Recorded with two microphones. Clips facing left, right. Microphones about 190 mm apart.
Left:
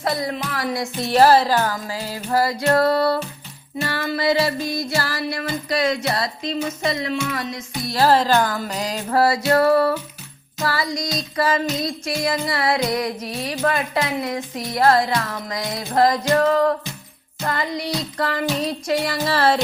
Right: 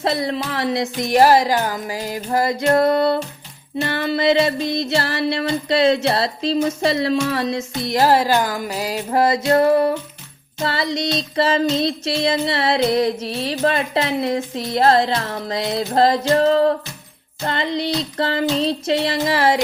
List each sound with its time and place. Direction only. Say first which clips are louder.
0.0 s music: right 3 dB; 30° right (ahead or behind)
6.7 s a sound: right 5 dB; 30° right (ahead or behind)
7.8 s music: right 1 dB; 20° right (ahead or behind)
9.0 s music: right 1 dB; 20° right (ahead or behind)